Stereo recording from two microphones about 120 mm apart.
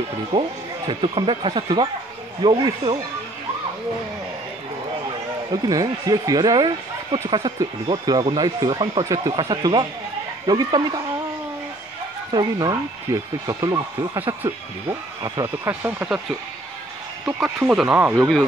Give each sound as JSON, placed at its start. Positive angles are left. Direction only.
{"t": 0.3, "sound": "speech", "side_deg": -30}
{"t": 0.8, "sound": "speech", "side_deg": -45}
{"t": 5.5, "sound": "speech", "side_deg": -30}
{"t": 12.3, "sound": "speech", "side_deg": -35}
{"t": 16.0, "sound": "speech", "side_deg": -20}
{"t": 17.6, "sound": "speech", "side_deg": -10}